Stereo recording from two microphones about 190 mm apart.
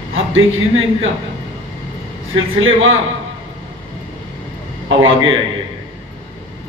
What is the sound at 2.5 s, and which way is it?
Speech, 90° right.